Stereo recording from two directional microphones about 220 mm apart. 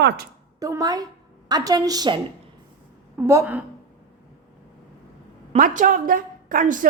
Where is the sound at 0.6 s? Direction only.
15° right (ahead or behind).